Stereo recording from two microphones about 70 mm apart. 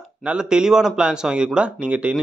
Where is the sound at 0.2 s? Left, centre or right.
Centre.